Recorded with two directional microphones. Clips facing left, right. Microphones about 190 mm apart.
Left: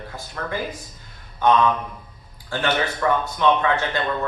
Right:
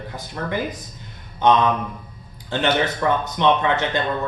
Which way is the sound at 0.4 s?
20° right (ahead or behind).